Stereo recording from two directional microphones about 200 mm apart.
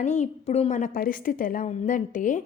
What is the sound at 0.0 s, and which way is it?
A woman's voice, 35° left (ahead or behind).